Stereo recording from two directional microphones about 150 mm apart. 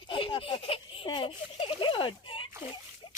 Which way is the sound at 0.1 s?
35° left (ahead or behind).